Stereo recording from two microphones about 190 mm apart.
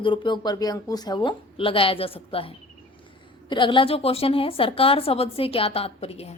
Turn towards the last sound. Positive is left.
turn(degrees=30)  # may be behind; listen again after turning